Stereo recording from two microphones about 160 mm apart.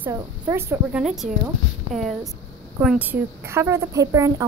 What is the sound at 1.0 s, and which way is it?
Speech, centre (ahead or behind).